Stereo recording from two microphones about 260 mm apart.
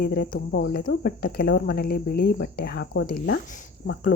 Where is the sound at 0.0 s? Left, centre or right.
Left.